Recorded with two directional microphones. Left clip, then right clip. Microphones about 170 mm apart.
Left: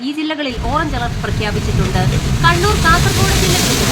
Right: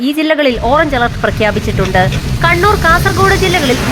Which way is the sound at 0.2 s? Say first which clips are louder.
Right 11 dB; 30° right (ahead or behind).